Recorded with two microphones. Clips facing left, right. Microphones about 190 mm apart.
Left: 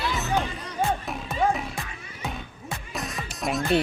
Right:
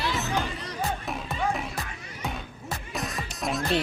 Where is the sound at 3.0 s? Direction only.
Centre (ahead or behind).